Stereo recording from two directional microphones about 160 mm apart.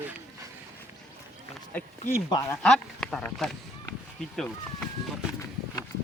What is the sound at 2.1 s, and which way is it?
Speech, 20° left (ahead or behind).